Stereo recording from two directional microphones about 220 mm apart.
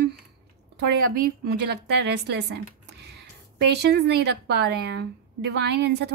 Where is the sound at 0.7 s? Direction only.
45° right (ahead or behind).